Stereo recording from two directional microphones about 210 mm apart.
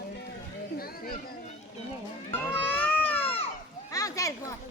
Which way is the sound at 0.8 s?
45° left (ahead or behind).